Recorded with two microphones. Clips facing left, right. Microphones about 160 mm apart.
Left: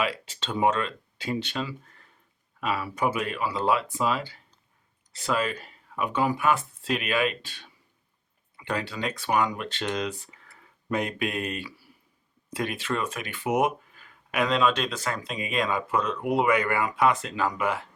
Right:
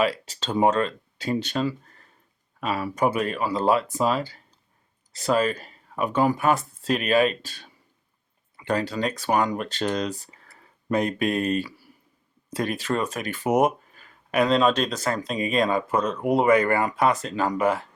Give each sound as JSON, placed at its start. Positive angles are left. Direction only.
{"t": 0.0, "sound": "speech", "side_deg": -40}